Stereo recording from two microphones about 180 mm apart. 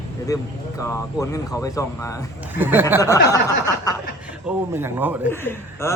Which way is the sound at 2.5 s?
10° right (ahead or behind).